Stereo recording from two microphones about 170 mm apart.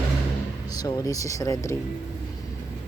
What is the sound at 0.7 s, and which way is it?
Speech, 20° left (ahead or behind).